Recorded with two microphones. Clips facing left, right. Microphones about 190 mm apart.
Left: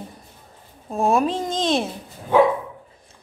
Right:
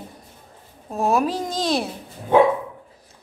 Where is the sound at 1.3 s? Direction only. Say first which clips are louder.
Left 1 dB; 25° left (ahead or behind).